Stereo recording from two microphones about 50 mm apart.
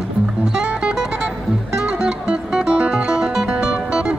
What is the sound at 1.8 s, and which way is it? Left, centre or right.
Music, centre.